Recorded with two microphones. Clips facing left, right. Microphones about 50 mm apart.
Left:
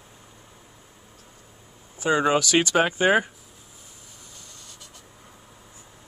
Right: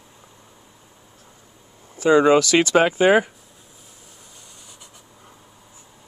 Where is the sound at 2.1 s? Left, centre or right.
Right.